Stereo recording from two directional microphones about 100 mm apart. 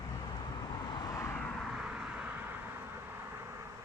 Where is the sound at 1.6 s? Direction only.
5° right (ahead or behind).